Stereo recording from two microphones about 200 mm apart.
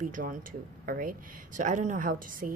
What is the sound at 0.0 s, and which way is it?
Speech, 40° right (ahead or behind).